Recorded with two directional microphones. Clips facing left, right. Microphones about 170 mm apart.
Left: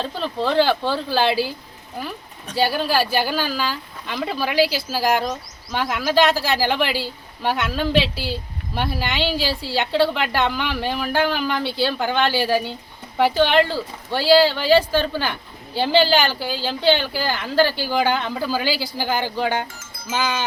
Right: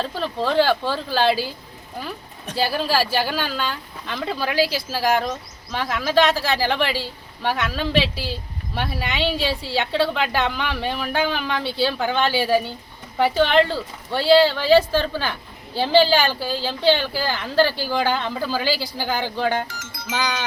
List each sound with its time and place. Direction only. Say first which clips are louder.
0.0 s a woman's voice: even; centre (ahead or behind)
2.6 s a woman's voice: left 1 dB; centre (ahead or behind)
19.6 s speech: right 1 dB; 75° right (ahead or behind)